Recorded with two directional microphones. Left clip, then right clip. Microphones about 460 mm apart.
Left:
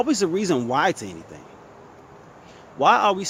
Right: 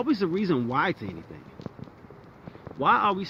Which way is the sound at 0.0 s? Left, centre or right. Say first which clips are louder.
Left 5 dB; centre.